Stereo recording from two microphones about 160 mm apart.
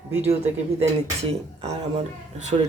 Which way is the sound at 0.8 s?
40° right (ahead or behind).